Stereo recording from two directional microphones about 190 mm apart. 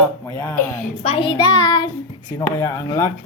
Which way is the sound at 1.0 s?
30° left (ahead or behind).